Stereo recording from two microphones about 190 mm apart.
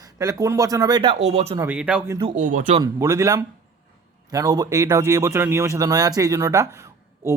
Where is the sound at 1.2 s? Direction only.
35° right (ahead or behind).